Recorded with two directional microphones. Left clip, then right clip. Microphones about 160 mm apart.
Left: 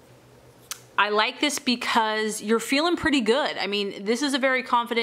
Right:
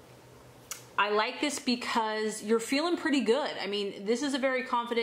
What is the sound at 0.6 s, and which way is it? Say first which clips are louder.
A woman's voice: left 5 dB; 30° left (ahead or behind).